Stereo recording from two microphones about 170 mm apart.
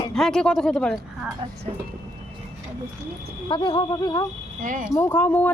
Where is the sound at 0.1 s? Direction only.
5° left (ahead or behind).